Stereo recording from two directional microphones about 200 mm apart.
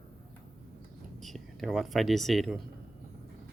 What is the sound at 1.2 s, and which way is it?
Speech, centre (ahead or behind).